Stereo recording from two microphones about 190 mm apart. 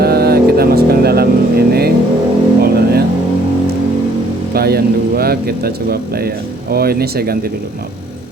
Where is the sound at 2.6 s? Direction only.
55° right (ahead or behind).